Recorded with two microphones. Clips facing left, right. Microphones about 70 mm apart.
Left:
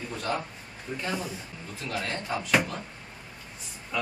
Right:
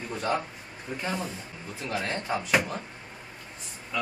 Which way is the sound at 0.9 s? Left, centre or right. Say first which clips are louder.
Even; centre.